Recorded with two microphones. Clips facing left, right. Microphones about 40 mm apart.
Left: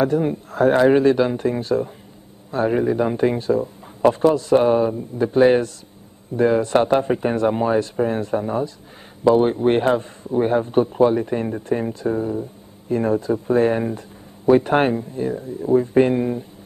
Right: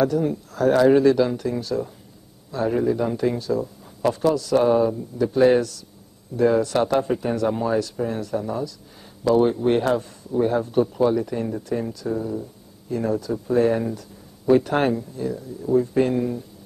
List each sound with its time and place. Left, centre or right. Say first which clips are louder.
0.0 s speech: left 2 dB; left